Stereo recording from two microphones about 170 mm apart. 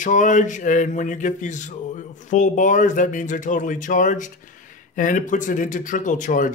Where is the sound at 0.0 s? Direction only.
50° left (ahead or behind).